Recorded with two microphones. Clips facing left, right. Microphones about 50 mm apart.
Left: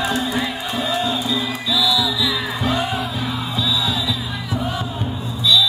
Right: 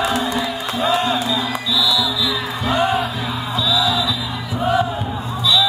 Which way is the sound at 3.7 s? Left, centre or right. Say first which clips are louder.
Right 5 dB; right.